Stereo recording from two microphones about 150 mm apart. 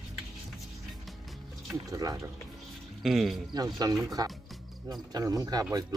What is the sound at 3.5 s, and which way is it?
Speech, 25° right (ahead or behind).